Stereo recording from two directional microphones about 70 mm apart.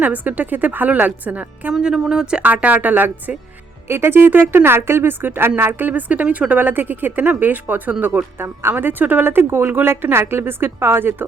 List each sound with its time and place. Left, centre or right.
0.0 s speech: right
1.7 s a woman's voice: centre; by 11.3 s right